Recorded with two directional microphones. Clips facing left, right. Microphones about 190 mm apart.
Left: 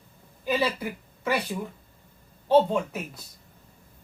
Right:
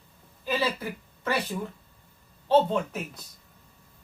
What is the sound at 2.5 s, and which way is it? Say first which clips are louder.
Speech: left 2 dB; 10° left (ahead or behind).